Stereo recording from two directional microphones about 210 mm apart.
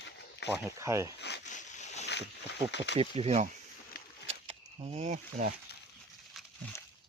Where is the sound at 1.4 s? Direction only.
35° left (ahead or behind).